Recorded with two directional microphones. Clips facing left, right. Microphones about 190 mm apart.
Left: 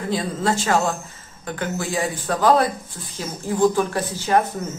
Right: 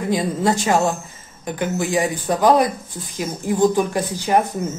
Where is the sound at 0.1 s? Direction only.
15° right (ahead or behind).